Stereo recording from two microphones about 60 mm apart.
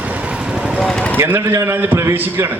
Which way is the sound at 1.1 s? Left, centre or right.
Right.